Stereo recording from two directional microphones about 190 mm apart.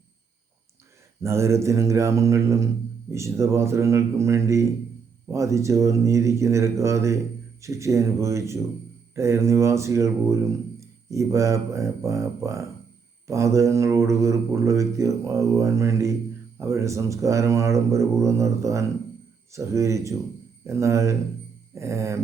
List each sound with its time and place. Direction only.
1.2 s speech: 15° right (ahead or behind)